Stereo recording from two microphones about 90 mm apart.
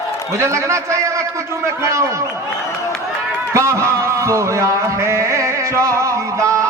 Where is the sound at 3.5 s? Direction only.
35° right (ahead or behind).